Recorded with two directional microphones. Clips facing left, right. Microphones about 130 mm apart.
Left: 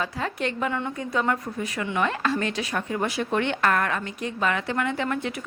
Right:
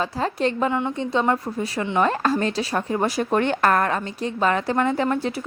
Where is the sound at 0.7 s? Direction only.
20° right (ahead or behind).